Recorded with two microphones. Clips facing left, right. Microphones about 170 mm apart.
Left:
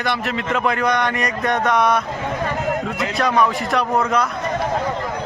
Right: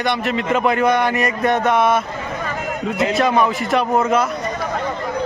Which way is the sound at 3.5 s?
Centre (ahead or behind).